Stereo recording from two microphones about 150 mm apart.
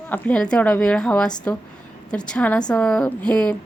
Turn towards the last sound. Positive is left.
turn(degrees=5)  # may be behind; listen again after turning